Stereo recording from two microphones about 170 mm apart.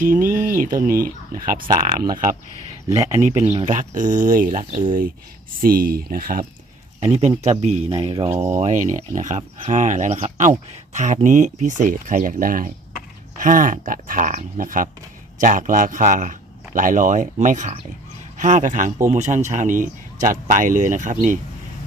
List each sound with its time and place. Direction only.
0.0 s speech: 55° right (ahead or behind)
2.9 s speech: 20° right (ahead or behind)
3.7 s a man's voice: 50° right (ahead or behind)
7.0 s a man's voice: 40° right (ahead or behind)